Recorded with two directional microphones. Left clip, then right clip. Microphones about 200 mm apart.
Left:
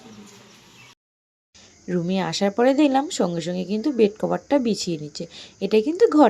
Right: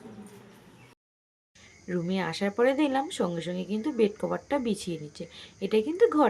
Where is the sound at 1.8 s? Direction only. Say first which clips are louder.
Left 6 dB; 30° left (ahead or behind).